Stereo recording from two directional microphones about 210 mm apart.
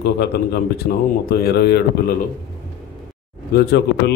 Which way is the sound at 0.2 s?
50° left (ahead or behind).